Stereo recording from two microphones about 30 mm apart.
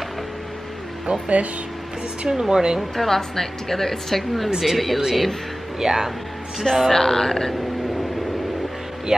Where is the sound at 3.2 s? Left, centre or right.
Centre.